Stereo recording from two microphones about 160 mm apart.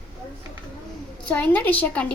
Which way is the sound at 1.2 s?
10° left (ahead or behind).